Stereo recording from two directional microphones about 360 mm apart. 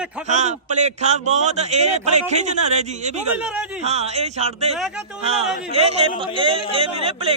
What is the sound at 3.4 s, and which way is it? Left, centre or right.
Speech, centre.